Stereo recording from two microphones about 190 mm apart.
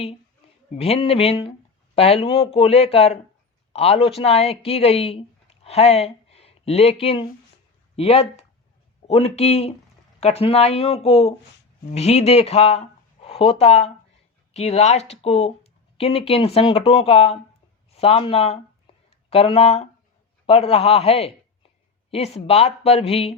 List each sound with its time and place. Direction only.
0.8 s speech: 30° left (ahead or behind)